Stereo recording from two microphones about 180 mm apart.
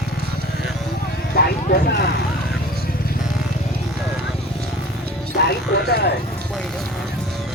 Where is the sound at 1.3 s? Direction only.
60° left (ahead or behind).